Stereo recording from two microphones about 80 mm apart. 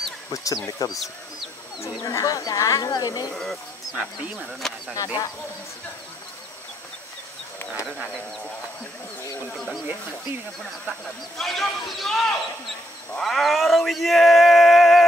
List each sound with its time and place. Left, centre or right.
0.3 s speech: left
0.9 s speech: centre
1.8 s speech: left
3.9 s speech: centre
4.5 s speech: centre
4.9 s speech: left
11.3 s speech: centre